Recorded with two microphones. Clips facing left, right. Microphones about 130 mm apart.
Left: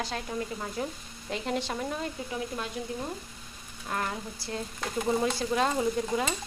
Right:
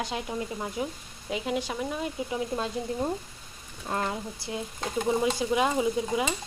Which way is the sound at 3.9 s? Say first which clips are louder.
Right 3 dB; 25° right (ahead or behind).